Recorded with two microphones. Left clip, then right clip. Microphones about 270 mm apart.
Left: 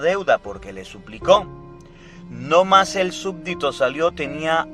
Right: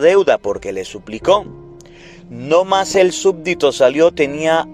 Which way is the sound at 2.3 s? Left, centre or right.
Centre.